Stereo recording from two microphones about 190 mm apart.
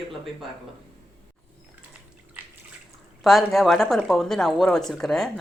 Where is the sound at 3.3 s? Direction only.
Centre (ahead or behind).